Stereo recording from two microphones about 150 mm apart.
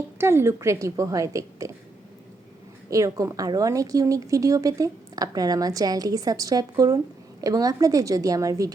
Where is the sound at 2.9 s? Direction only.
20° right (ahead or behind).